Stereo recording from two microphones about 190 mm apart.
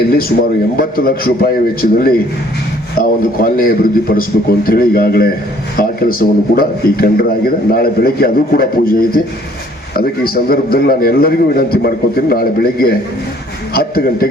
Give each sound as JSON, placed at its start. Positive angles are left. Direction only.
{"t": 0.1, "sound": "a man's voice", "side_deg": 55}